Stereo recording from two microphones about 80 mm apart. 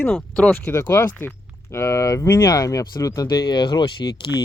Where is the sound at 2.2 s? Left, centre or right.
Left.